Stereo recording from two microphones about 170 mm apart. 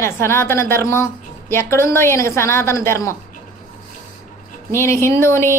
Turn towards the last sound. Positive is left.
turn(degrees=15)  # may be behind; listen again after turning